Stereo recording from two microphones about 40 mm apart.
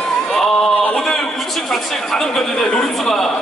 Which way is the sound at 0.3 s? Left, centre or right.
Centre.